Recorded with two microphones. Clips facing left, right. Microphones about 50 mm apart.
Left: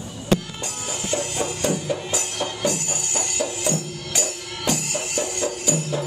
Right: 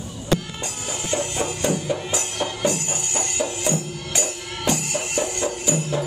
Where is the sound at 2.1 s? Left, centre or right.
Right.